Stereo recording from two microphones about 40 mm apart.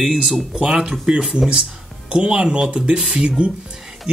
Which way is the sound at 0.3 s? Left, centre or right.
Right.